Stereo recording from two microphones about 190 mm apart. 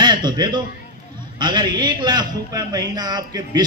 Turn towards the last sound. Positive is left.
turn(degrees=-20)  # may be behind; listen again after turning